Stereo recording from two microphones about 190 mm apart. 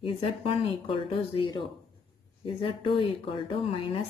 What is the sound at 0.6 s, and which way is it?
Speech, 25° left (ahead or behind).